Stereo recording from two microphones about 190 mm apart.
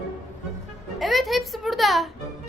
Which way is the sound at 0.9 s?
Centre (ahead or behind).